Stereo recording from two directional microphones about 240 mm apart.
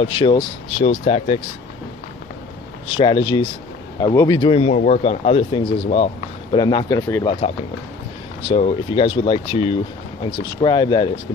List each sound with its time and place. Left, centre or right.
0.0 s speech: left
2.9 s speech: left
8.4 s speech: left